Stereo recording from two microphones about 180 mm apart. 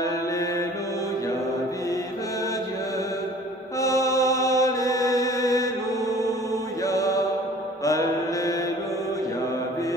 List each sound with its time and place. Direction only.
3.8 s mantra: 15° left (ahead or behind)
6.9 s mantra: 20° left (ahead or behind)